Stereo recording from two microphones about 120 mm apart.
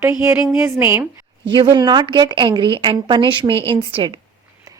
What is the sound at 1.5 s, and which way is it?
A woman's voice, 40° right (ahead or behind).